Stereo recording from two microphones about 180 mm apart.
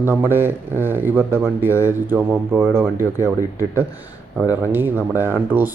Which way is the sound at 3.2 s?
15° left (ahead or behind).